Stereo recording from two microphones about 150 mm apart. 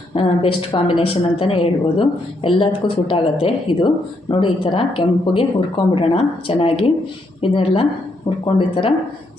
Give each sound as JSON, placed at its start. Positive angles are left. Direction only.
{"t": 0.1, "sound": "a woman's voice", "side_deg": 40}